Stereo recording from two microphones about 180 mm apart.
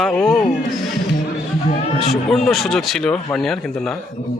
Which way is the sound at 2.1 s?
Centre (ahead or behind).